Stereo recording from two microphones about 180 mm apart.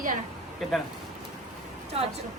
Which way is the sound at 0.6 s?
Centre (ahead or behind).